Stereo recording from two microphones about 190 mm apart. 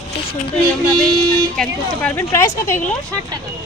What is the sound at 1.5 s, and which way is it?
Speech, 5° left (ahead or behind).